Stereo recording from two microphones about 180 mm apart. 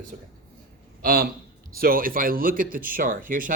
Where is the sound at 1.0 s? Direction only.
60° right (ahead or behind).